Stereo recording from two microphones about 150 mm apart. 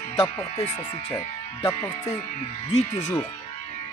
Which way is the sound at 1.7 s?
25° left (ahead or behind).